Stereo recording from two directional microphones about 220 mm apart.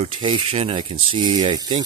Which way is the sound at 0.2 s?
25° right (ahead or behind).